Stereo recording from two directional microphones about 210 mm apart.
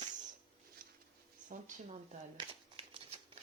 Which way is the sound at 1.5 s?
35° right (ahead or behind).